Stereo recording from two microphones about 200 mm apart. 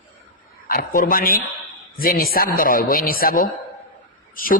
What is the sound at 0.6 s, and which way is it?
A man's voice, 50° left (ahead or behind).